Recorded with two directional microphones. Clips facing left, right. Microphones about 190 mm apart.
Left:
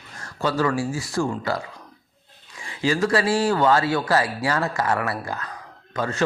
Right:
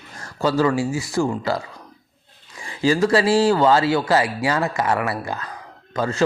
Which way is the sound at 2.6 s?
35° right (ahead or behind).